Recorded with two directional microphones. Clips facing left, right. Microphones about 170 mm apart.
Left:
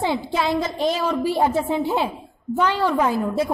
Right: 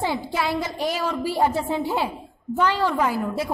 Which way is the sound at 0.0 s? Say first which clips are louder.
Left 3 dB; 20° left (ahead or behind).